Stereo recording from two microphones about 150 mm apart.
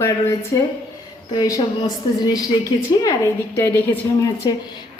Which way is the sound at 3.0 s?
20° left (ahead or behind).